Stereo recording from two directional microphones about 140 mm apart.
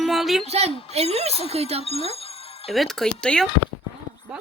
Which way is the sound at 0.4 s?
50° right (ahead or behind).